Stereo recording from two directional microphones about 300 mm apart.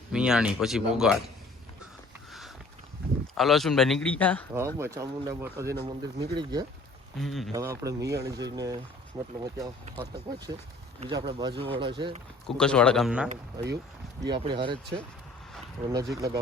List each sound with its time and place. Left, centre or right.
0.1 s speech: centre
3.3 s speech: centre
4.5 s speech: centre
7.2 s speech: centre
7.5 s speech: centre
12.5 s speech: centre
13.2 s speech: right
14.2 s speech: centre
15.9 s speech: centre